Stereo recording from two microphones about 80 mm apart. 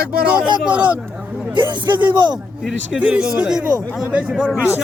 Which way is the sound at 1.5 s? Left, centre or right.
Right.